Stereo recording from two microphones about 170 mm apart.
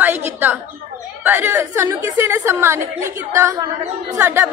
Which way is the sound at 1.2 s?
15° right (ahead or behind).